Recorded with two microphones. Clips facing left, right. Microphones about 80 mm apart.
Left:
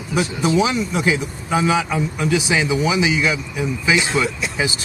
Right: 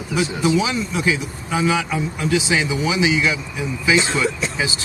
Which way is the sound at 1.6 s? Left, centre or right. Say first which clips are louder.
Even; centre.